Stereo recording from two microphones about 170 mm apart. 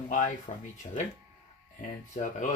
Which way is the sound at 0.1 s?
45° left (ahead or behind).